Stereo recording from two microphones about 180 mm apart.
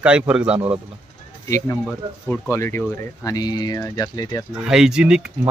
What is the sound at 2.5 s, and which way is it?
Speech, 15° left (ahead or behind).